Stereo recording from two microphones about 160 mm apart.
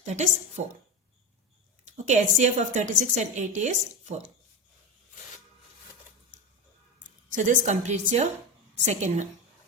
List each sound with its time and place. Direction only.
0.0 s a woman's voice: 50° right (ahead or behind)
1.9 s a woman's voice: 50° right (ahead or behind)
7.3 s a woman's voice: 55° right (ahead or behind)